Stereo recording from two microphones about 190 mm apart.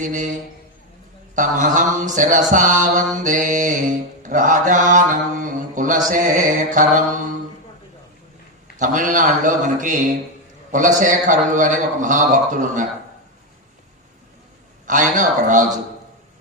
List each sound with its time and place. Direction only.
0.0 s a man's voice: 40° right (ahead or behind)
1.4 s music: 40° right (ahead or behind)
8.8 s music: 40° right (ahead or behind)
10.7 s a man's voice: 40° right (ahead or behind)
14.8 s music: 40° right (ahead or behind)